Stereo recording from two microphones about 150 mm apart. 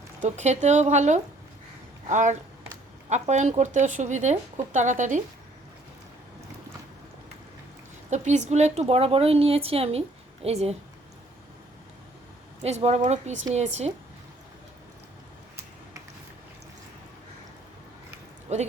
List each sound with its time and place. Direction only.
0.2 s speech: 50° right (ahead or behind)
8.1 s speech: 50° right (ahead or behind)
12.6 s speech: 45° right (ahead or behind)
18.5 s a sound: 45° right (ahead or behind)